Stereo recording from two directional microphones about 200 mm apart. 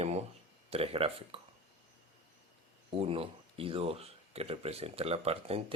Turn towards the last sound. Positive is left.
turn(degrees=-30)  # may be behind; listen again after turning